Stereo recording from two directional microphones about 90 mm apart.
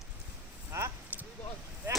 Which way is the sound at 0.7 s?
30° right (ahead or behind).